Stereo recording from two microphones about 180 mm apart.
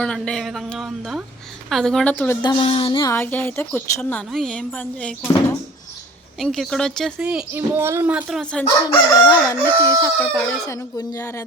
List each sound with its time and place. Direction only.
0.0 s speech: 5° left (ahead or behind)
2.4 s a sound: 25° left (ahead or behind)
3.1 s speech: 10° left (ahead or behind)
6.4 s speech: centre (ahead or behind)
8.9 s speech: 20° left (ahead or behind)